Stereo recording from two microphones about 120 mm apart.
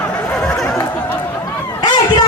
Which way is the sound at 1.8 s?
35° left (ahead or behind).